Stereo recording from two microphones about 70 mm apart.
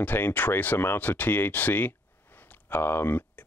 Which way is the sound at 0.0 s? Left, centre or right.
Left.